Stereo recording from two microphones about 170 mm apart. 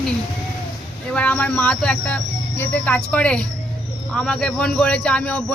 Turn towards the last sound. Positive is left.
turn(degrees=5)  # may be behind; listen again after turning